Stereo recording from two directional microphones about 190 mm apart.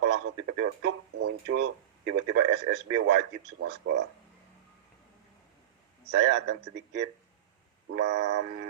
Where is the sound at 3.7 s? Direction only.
65° right (ahead or behind).